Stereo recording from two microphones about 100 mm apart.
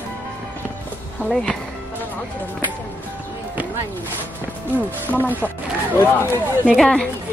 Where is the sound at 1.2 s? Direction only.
5° left (ahead or behind).